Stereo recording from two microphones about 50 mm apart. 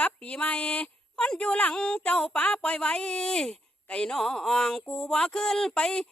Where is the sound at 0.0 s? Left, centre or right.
Left.